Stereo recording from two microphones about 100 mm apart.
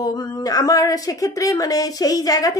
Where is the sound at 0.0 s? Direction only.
40° left (ahead or behind).